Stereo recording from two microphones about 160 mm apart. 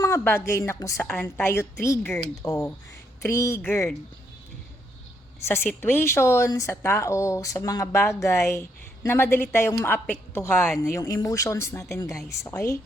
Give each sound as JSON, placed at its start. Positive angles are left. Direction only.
{"t": 0.0, "sound": "a woman's voice", "side_deg": 15}
{"t": 5.5, "sound": "a woman's voice", "side_deg": 15}